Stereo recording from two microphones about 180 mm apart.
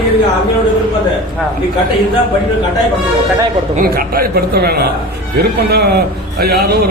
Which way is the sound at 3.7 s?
55° right (ahead or behind).